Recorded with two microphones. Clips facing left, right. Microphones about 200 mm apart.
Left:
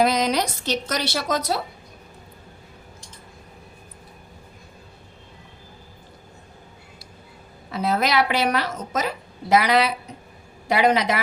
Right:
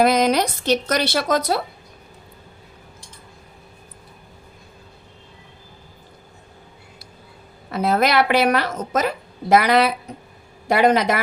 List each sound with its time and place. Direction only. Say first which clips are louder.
0.0 s a woman's voice: right 4 dB; 55° right (ahead or behind)
7.7 s a woman's voice: right 4 dB; 55° right (ahead or behind)